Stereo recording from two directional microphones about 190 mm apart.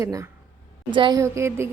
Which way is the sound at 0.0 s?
15° right (ahead or behind).